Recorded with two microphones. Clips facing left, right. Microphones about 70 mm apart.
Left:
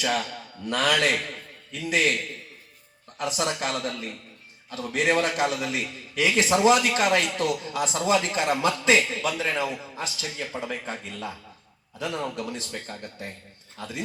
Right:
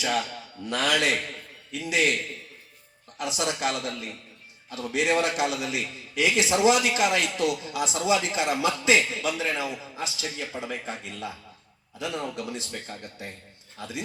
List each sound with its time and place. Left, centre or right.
0.7 s a man's voice: left
3.2 s a man's voice: left